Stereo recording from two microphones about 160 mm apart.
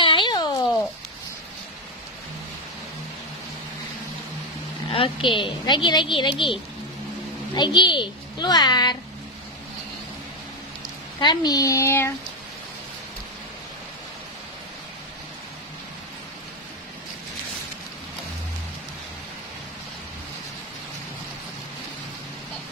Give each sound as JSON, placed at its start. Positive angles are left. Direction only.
{"t": 0.0, "sound": "a sound", "side_deg": 30}
{"t": 4.9, "sound": "a woman's voice", "side_deg": 35}
{"t": 11.1, "sound": "a child's voice", "side_deg": 25}